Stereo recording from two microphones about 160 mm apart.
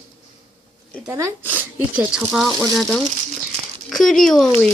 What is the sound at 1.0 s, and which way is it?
Speech, 15° right (ahead or behind).